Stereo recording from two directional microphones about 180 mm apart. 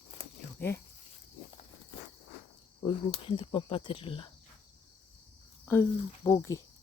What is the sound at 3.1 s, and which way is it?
Speech, 30° left (ahead or behind).